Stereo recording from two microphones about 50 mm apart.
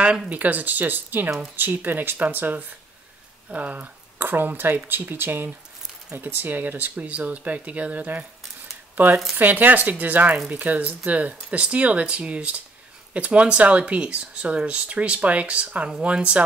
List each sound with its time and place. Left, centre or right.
0.3 s speech: right
3.4 s speech: right
4.2 s speech: right
7.0 s speech: right